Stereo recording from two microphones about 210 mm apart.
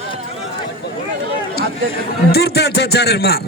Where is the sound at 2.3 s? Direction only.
50° left (ahead or behind).